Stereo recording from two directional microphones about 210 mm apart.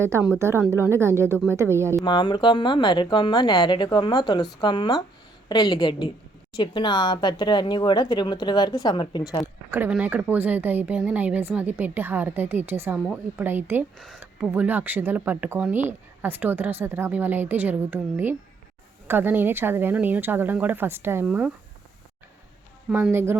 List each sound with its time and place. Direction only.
0.0 s a woman's voice: 10° right (ahead or behind)
2.0 s speech: 20° left (ahead or behind)
9.7 s a woman's voice: 10° right (ahead or behind)
22.9 s a woman's voice: 10° right (ahead or behind)